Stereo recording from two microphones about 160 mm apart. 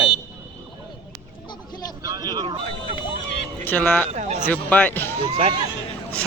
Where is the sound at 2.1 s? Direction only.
25° right (ahead or behind).